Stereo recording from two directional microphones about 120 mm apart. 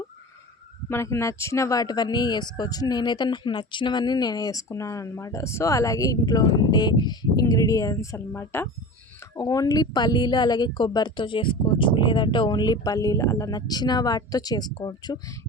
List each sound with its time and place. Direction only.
0.9 s speech: 20° left (ahead or behind)
9.3 s speech: 30° left (ahead or behind)